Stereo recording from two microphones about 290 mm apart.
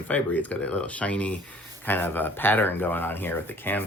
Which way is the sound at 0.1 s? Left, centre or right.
Centre.